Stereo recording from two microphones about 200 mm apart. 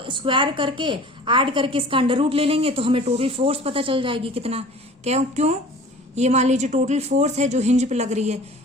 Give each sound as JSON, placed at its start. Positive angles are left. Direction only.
{"t": 0.0, "sound": "a woman's voice", "side_deg": -25}